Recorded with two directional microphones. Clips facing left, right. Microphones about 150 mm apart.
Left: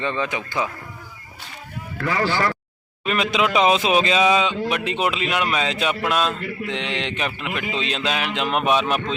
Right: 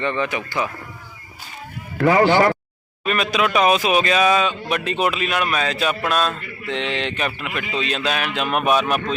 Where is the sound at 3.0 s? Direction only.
20° left (ahead or behind).